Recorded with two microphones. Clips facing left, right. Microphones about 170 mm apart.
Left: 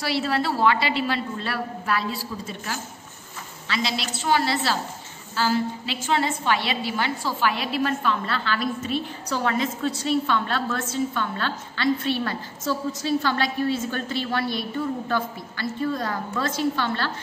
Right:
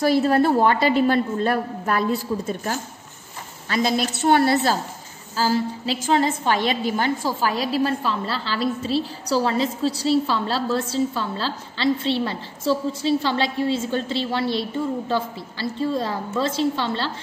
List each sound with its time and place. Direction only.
0.0 s a woman's voice: 45° right (ahead or behind)
5.3 s a woman's voice: 35° right (ahead or behind)